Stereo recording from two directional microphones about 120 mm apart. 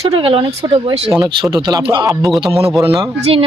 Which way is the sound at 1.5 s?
35° right (ahead or behind).